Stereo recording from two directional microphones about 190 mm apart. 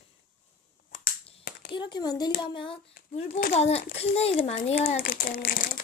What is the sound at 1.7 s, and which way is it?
Speech, 20° left (ahead or behind).